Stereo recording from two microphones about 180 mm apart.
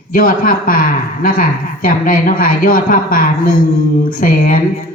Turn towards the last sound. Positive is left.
turn(degrees=50)  # may be behind; listen again after turning